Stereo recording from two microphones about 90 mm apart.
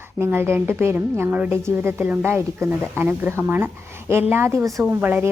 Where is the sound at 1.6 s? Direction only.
30° right (ahead or behind).